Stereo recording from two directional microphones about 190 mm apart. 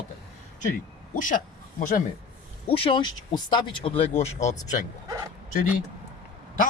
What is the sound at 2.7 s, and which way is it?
Speech, 30° left (ahead or behind).